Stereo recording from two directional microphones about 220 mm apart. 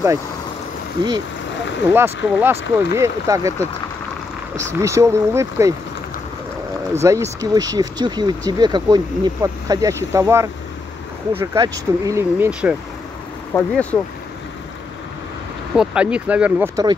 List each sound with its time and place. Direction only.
1.9 s speech: 10° right (ahead or behind)
4.7 s speech: 15° right (ahead or behind)
6.9 s speech: 10° right (ahead or behind)
13.5 s speech: 10° left (ahead or behind)
15.7 s speech: 5° right (ahead or behind)